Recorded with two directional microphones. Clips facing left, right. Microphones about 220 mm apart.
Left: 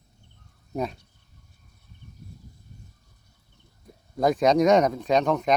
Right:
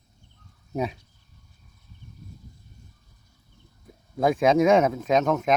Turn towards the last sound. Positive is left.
turn(degrees=0)  # may be behind; listen again after turning